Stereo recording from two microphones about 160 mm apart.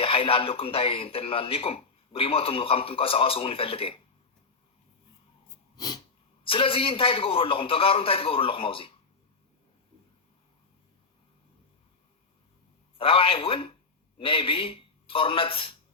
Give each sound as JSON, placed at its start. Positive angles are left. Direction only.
{"t": 0.0, "sound": "speech", "side_deg": 35}
{"t": 5.7, "sound": "sneeze", "side_deg": 25}
{"t": 6.4, "sound": "speech", "side_deg": 35}
{"t": 13.0, "sound": "speech", "side_deg": 35}